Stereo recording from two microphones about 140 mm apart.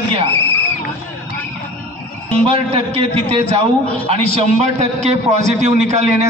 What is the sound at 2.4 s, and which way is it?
A man's voice, 45° right (ahead or behind).